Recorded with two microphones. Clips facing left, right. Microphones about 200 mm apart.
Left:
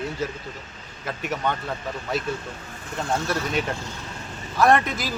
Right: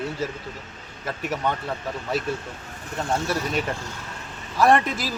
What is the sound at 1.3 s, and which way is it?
Speech, 5° right (ahead or behind).